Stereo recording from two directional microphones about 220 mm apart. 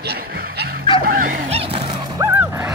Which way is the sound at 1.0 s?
40° right (ahead or behind).